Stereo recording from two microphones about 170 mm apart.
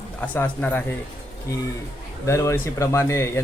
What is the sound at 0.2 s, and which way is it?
Speech, 10° left (ahead or behind).